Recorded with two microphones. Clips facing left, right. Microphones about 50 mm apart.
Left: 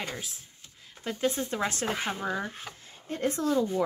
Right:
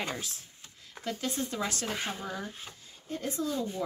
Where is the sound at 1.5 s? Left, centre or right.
Left.